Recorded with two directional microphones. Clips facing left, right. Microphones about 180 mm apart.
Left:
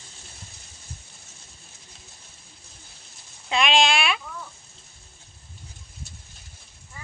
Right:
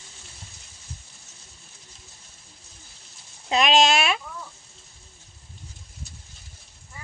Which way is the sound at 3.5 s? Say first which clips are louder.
Right 2 dB; 40° right (ahead or behind).